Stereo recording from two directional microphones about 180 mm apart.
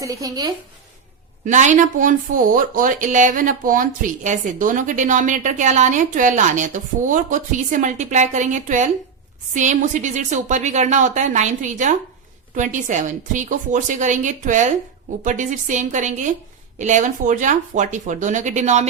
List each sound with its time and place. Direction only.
0.0 s speech: 20° right (ahead or behind)
1.5 s speech: 45° right (ahead or behind)